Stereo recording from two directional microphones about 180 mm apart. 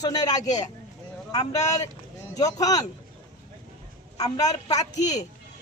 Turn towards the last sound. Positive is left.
turn(degrees=20)  # may be behind; listen again after turning